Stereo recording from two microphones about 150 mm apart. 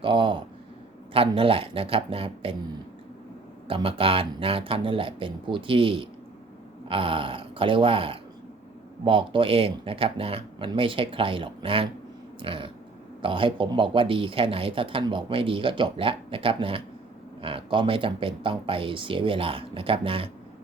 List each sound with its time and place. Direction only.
0.0 s speech: 35° right (ahead or behind)
3.7 s speech: 35° right (ahead or behind)